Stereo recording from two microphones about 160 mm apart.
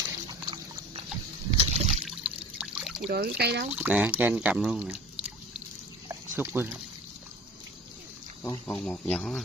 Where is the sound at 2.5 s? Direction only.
5° right (ahead or behind).